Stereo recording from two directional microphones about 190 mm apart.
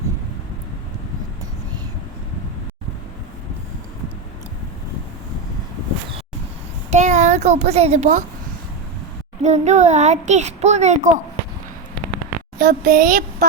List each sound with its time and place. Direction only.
6.9 s a child's voice: 40° right (ahead or behind)
9.4 s speech: 35° right (ahead or behind)
12.5 s a woman's voice: 45° right (ahead or behind)